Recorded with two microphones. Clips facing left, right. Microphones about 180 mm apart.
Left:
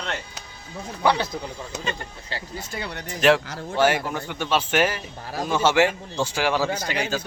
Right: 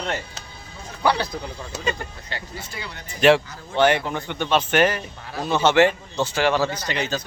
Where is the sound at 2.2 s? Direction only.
30° left (ahead or behind).